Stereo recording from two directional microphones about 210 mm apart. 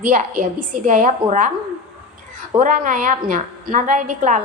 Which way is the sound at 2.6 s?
40° right (ahead or behind).